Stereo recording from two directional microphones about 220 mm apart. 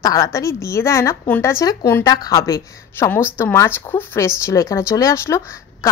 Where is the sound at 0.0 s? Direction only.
15° left (ahead or behind).